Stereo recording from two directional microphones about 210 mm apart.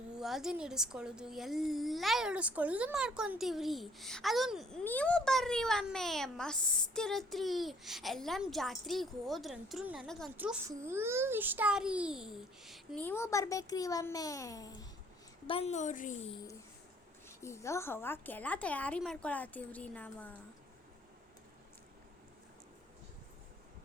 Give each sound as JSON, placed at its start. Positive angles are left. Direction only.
{"t": 0.1, "sound": "a woman's voice", "side_deg": 0}
{"t": 15.4, "sound": "a woman's voice", "side_deg": 30}
{"t": 17.2, "sound": "speech", "side_deg": 15}